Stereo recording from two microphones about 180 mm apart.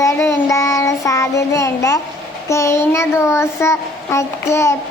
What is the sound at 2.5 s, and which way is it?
A child's voice, 15° left (ahead or behind).